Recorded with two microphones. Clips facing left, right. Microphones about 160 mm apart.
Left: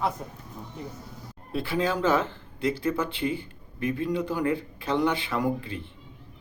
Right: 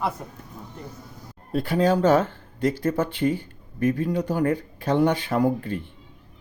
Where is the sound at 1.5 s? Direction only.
45° right (ahead or behind).